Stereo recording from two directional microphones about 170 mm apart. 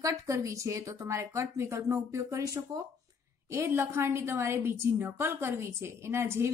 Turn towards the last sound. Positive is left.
turn(degrees=-15)  # may be behind; listen again after turning